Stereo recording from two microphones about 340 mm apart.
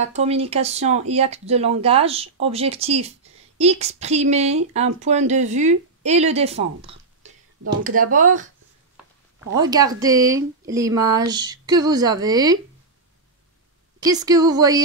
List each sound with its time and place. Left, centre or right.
0.0 s speech: centre
9.6 s speech: centre
13.9 s speech: centre